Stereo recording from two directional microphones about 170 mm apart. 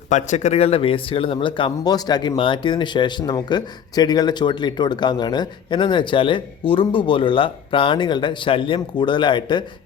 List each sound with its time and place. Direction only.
0.1 s speech: 45° left (ahead or behind); by 9.6 s 30° left (ahead or behind)